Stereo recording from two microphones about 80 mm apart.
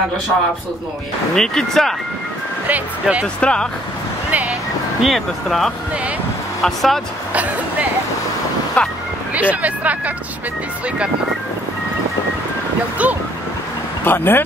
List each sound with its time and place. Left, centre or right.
1.3 s speech: centre
2.7 s speech: centre
3.3 s speech: centre
4.3 s speech: centre
5.0 s speech: centre
8.8 s speech: centre
9.3 s speech: centre
13.0 s speech: centre
14.0 s speech: left